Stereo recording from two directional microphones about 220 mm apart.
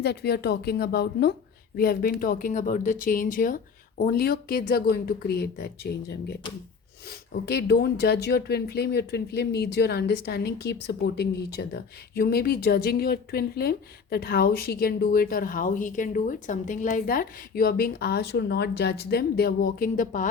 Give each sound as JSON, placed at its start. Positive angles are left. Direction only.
{"t": 0.0, "sound": "speech", "side_deg": 50}